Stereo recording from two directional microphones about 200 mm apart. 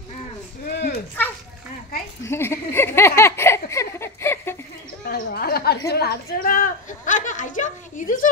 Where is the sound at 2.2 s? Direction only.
15° left (ahead or behind).